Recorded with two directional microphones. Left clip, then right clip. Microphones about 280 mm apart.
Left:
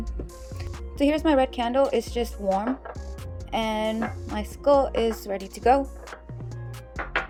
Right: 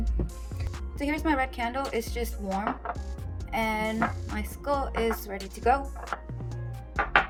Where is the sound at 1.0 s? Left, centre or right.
Left.